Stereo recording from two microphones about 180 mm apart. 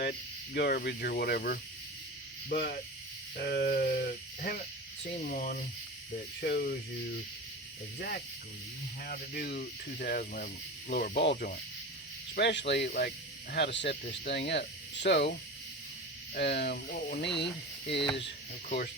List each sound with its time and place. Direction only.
0.0 s speech: 65° left (ahead or behind)
6.4 s speech: 60° left (ahead or behind)
7.9 s speech: 60° left (ahead or behind)
16.3 s speech: 65° left (ahead or behind)